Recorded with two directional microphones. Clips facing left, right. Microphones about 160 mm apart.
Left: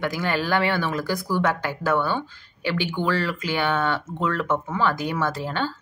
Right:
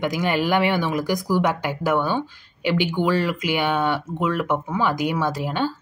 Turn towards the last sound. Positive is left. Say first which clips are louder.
# right 3 dB
turn(degrees=-15)  # may be behind; listen again after turning